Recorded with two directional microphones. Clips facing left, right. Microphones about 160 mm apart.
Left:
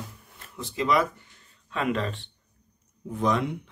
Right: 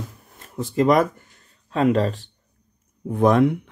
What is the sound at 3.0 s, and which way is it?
Speech, 55° right (ahead or behind).